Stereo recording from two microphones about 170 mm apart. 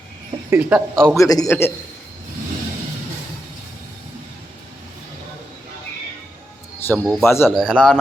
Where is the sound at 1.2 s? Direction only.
20° left (ahead or behind).